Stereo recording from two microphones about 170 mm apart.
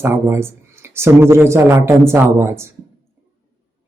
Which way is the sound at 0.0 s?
15° right (ahead or behind).